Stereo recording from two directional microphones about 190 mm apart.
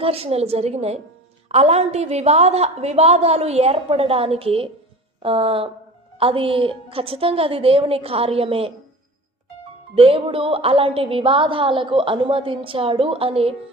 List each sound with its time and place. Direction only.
0.0 s a woman's voice: 30° right (ahead or behind)
9.9 s a woman's voice: 30° right (ahead or behind)